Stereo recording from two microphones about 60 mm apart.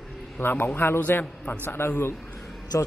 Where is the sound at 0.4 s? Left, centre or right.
Left.